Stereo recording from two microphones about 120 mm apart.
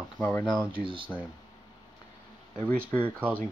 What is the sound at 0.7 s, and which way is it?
Speech, 45° right (ahead or behind).